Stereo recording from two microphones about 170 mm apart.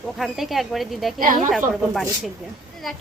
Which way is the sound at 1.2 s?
50° right (ahead or behind).